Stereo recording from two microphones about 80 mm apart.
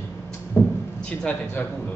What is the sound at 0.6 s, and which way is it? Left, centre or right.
A man's voice, left.